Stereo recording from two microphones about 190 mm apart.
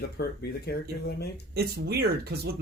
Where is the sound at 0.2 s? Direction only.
55° left (ahead or behind).